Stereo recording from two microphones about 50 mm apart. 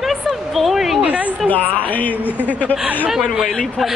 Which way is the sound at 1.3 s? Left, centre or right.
Left.